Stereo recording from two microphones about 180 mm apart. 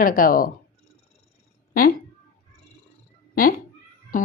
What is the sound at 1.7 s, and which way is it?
Speech, 55° left (ahead or behind).